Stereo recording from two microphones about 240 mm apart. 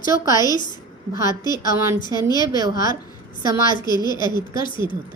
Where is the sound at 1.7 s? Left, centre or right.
Centre.